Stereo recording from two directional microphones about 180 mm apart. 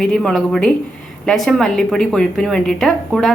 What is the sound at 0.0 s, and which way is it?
A woman's voice, 5° left (ahead or behind).